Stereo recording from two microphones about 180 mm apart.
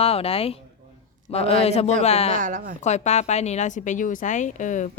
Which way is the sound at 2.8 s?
40° left (ahead or behind).